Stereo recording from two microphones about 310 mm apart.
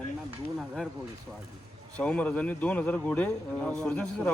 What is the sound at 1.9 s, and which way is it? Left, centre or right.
Speech, centre.